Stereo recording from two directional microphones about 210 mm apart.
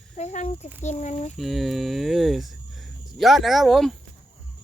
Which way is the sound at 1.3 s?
Centre (ahead or behind).